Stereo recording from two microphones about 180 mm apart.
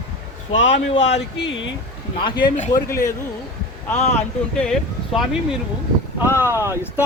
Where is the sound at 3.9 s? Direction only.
40° left (ahead or behind).